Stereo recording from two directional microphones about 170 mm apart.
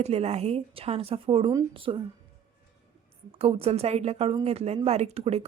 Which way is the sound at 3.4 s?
35° right (ahead or behind).